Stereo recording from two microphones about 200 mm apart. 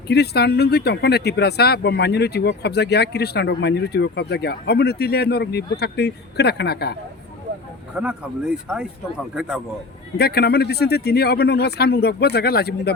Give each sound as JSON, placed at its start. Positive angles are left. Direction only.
{"t": 0.1, "sound": "speech", "side_deg": 55}
{"t": 7.9, "sound": "speech", "side_deg": -5}
{"t": 10.2, "sound": "speech", "side_deg": 50}